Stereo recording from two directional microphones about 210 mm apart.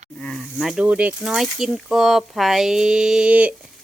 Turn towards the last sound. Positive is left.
turn(degrees=-5)  # may be behind; listen again after turning